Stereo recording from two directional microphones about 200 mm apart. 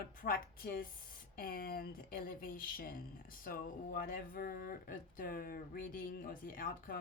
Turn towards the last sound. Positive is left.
turn(degrees=45)  # may be behind; listen again after turning